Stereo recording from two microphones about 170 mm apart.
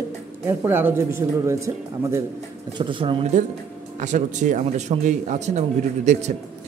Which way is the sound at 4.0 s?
45° right (ahead or behind).